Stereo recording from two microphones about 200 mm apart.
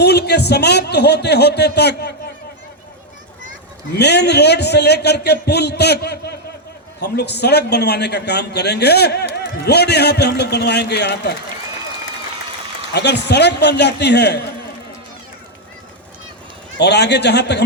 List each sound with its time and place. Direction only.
0.0 s a man's voice: 55° left (ahead or behind)
3.9 s a man's voice: 55° left (ahead or behind)
12.9 s a man's voice: 55° left (ahead or behind)
16.7 s a man's voice: 55° left (ahead or behind)